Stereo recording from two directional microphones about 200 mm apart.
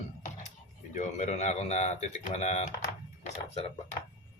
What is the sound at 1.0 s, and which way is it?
Speech, 35° left (ahead or behind).